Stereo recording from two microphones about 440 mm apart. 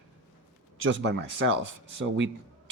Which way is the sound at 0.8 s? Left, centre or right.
Right.